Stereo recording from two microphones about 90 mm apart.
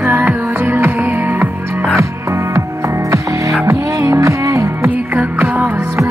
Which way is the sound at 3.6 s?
35° right (ahead or behind).